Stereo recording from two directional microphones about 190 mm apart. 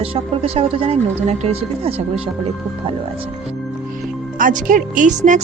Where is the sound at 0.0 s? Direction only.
30° right (ahead or behind).